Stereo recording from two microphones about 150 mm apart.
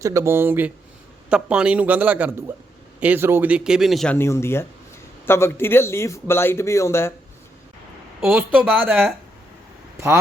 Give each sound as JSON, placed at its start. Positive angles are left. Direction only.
{"t": 0.0, "sound": "a man's voice", "side_deg": -20}
{"t": 4.1, "sound": "a man's voice", "side_deg": 15}
{"t": 8.2, "sound": "a man's voice", "side_deg": -10}